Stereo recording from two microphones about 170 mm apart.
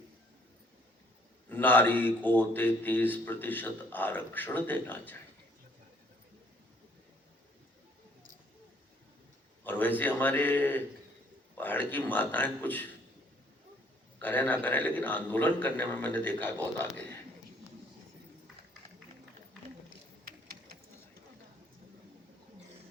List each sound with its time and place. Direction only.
1.5 s a man's voice: 10° left (ahead or behind)
9.6 s a man's voice: 10° left (ahead or behind)
14.2 s a man's voice: 10° left (ahead or behind)